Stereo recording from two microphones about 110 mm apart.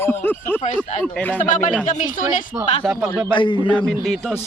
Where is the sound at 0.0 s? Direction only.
20° left (ahead or behind).